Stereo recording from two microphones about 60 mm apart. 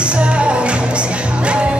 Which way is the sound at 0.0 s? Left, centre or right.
Centre.